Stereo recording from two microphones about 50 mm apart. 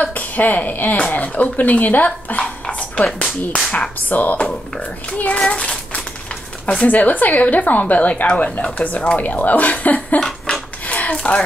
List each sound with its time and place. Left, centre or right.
0.0 s a woman's voice: left
3.1 s speech: centre
4.1 s speech: left
5.4 s child singing: centre
6.6 s speech: left
10.2 s a sound: centre
10.9 s a sound: left